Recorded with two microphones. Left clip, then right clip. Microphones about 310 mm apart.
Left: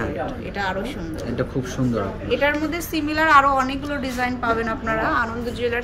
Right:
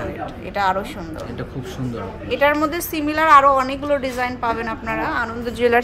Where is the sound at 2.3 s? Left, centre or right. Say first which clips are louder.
Right 4 dB; centre.